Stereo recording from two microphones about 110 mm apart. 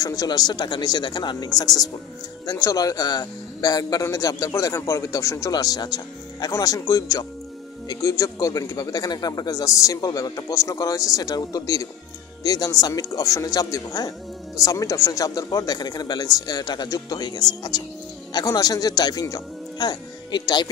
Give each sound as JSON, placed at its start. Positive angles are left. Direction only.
{"t": 0.0, "sound": "speech", "side_deg": 30}